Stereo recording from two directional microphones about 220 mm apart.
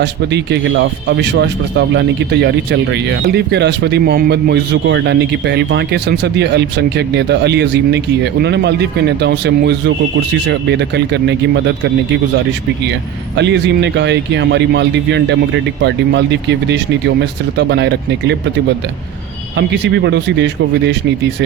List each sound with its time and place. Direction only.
0.0 s speech: 50° right (ahead or behind)
19.5 s speech: 55° right (ahead or behind)